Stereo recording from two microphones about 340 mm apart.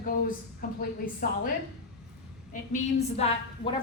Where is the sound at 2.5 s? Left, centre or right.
Left.